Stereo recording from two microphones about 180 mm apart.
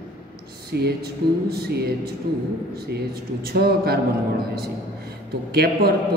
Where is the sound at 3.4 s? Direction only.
60° right (ahead or behind).